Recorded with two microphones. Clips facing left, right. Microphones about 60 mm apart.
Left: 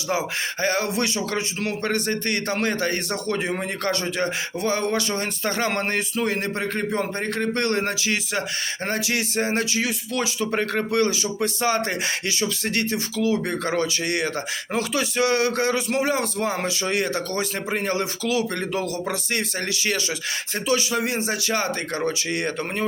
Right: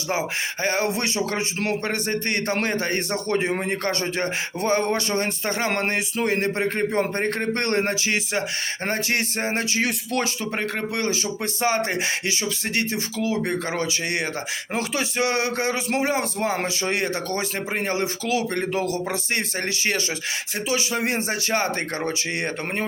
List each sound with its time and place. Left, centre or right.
0.1 s a man's voice: right
1.8 s a man's voice: right
7.2 s speech: right
9.8 s speech: right
10.5 s speech: centre
11.1 s a man's voice: right
21.0 s speech: right